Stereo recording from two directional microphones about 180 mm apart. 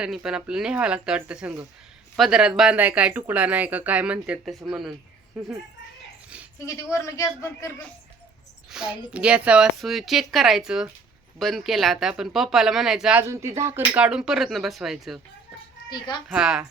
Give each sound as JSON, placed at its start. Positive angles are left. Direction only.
{"t": 0.0, "sound": "a woman's voice", "side_deg": -5}
{"t": 6.9, "sound": "speech", "side_deg": 15}
{"t": 8.7, "sound": "a woman's voice", "side_deg": -5}
{"t": 13.2, "sound": "a woman's voice", "side_deg": -15}
{"t": 15.9, "sound": "a child's voice", "side_deg": 25}
{"t": 16.3, "sound": "a woman's voice", "side_deg": -5}